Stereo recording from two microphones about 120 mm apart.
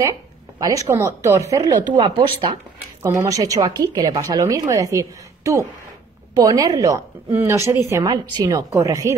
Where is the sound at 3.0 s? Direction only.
25° right (ahead or behind).